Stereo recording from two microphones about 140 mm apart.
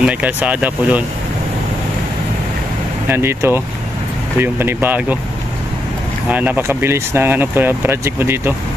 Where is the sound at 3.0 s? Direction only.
15° right (ahead or behind).